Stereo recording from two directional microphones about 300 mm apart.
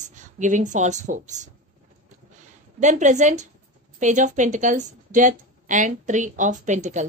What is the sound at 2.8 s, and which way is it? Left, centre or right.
A woman's voice, right.